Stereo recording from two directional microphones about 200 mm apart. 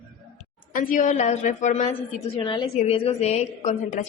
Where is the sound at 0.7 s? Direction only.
40° left (ahead or behind).